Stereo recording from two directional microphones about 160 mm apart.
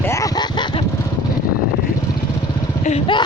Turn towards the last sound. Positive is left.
turn(degrees=35)  # may be behind; listen again after turning